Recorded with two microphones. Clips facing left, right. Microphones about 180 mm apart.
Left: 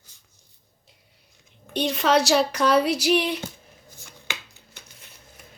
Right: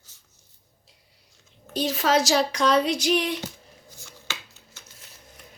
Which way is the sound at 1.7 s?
Centre (ahead or behind).